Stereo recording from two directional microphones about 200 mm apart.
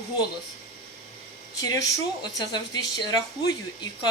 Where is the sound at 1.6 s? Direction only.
20° left (ahead or behind).